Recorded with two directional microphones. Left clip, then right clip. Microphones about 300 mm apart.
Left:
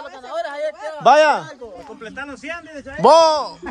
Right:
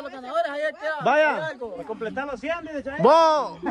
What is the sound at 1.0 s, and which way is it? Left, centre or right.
Speech, centre.